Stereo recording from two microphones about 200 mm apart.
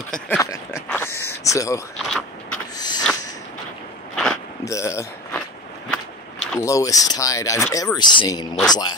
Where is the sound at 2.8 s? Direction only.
20° left (ahead or behind).